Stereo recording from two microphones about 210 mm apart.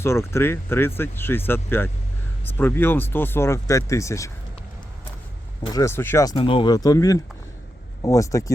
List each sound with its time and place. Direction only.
0.0 s speech: 10° left (ahead or behind)
5.7 s speech: 10° left (ahead or behind)
6.3 s speech: 25° left (ahead or behind)